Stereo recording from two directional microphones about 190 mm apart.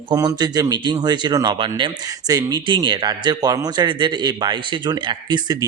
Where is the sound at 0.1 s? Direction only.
20° right (ahead or behind).